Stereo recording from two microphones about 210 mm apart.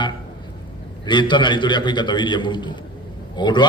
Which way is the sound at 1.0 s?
20° left (ahead or behind).